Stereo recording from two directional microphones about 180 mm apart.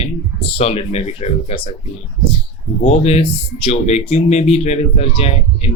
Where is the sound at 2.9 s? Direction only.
35° left (ahead or behind).